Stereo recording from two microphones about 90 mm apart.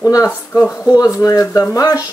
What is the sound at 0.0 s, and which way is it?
Speech, 35° left (ahead or behind).